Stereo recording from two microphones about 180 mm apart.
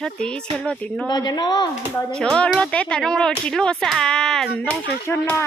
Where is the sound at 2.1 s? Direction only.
5° left (ahead or behind).